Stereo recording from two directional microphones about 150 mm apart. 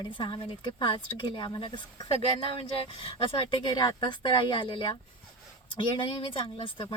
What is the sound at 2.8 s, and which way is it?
Speech, 40° left (ahead or behind).